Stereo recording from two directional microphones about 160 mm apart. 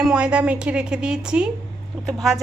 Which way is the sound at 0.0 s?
5° right (ahead or behind).